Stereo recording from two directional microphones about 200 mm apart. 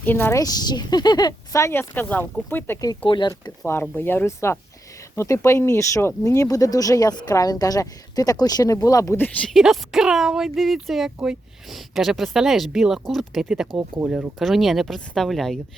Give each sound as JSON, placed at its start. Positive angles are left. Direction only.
{"t": 0.0, "sound": "speech", "side_deg": 10}
{"t": 3.7, "sound": "speech", "side_deg": 10}
{"t": 9.5, "sound": "speech", "side_deg": 0}